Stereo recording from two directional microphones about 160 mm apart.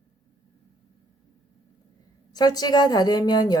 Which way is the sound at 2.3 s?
25° left (ahead or behind).